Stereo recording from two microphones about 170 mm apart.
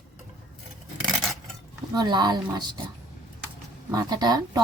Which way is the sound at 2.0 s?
25° right (ahead or behind).